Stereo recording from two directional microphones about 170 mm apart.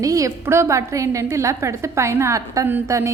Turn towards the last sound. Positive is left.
turn(degrees=-15)  # may be behind; listen again after turning